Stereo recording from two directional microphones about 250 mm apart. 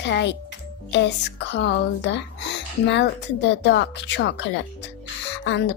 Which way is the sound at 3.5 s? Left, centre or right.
Left.